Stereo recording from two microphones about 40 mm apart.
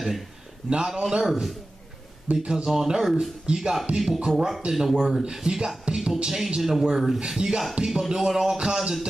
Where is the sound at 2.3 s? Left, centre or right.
Centre.